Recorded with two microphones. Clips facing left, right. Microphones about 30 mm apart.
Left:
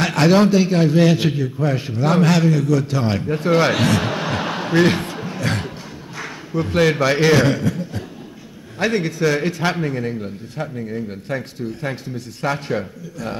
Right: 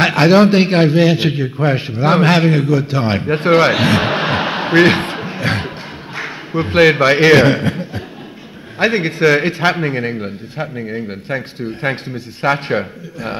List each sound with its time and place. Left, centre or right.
0.0 s a man's voice: right
0.5 s a man's voice: right
0.9 s speech: right
2.7 s speech: right
3.5 s a man's voice: right